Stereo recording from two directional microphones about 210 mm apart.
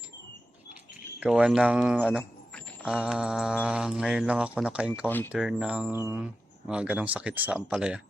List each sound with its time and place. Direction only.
1.2 s speech: 5° right (ahead or behind)
5.0 s speech: 10° left (ahead or behind)
5.3 s speech: 5° right (ahead or behind)